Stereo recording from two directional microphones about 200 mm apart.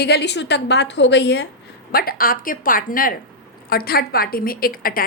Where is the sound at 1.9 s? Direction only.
50° left (ahead or behind).